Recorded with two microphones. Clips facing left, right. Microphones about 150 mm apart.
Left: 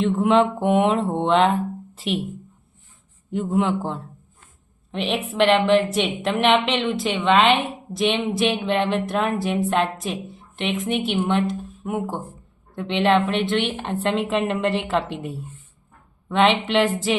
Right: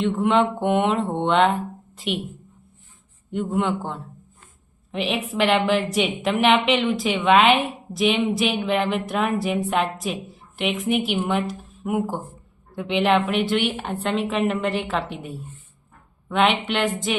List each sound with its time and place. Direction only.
0.0 s a woman's voice: centre (ahead or behind)
3.3 s a woman's voice: centre (ahead or behind)
16.3 s a woman's voice: 5° right (ahead or behind)